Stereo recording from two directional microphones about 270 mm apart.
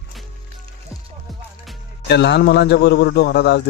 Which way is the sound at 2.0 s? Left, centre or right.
Left.